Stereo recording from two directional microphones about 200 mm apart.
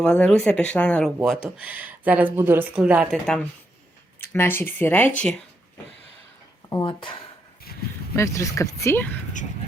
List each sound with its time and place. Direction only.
0.0 s speech: 5° left (ahead or behind)
6.7 s speech: 20° left (ahead or behind)